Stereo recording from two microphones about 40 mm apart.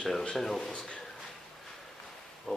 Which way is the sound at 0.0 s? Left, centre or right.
Centre.